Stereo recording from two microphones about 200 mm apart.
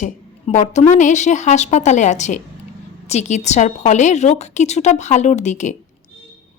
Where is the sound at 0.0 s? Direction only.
40° left (ahead or behind).